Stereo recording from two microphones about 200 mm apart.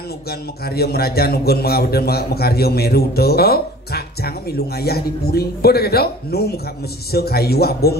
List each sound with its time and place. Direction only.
0.3 s a man's voice: 50° left (ahead or behind)